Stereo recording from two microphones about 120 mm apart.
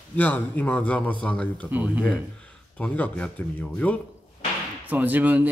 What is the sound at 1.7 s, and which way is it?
Speech, 15° right (ahead or behind).